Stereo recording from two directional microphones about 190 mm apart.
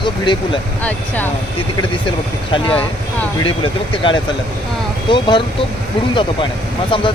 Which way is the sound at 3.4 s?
25° left (ahead or behind).